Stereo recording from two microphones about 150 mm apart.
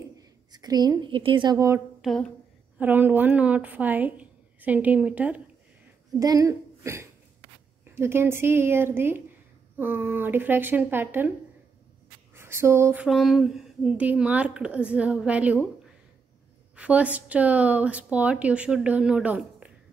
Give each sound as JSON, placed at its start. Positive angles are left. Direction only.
{"t": 0.2, "sound": "a woman's voice", "side_deg": -25}
{"t": 2.0, "sound": "speech", "side_deg": 5}
{"t": 2.8, "sound": "speech", "side_deg": -10}
{"t": 6.1, "sound": "a woman's voice", "side_deg": -25}
{"t": 12.4, "sound": "a sound", "side_deg": -15}
{"t": 13.0, "sound": "speech", "side_deg": 0}
{"t": 16.7, "sound": "speech", "side_deg": -10}